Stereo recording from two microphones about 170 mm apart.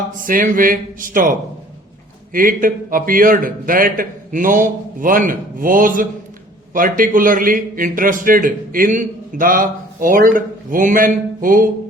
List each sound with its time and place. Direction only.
0.2 s a man's voice: 55° right (ahead or behind)